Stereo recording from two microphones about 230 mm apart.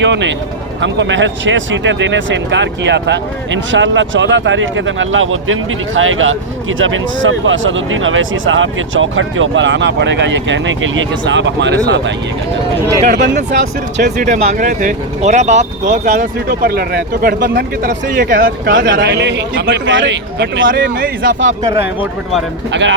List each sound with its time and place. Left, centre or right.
0.0 s speech: right
14.0 s speech: right
18.9 s speech: right
22.7 s speech: right